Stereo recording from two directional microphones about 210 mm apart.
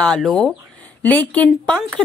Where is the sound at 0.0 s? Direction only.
5° left (ahead or behind).